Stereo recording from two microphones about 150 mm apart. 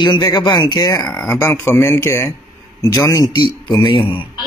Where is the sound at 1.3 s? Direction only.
15° left (ahead or behind); by 4.2 s 35° left (ahead or behind).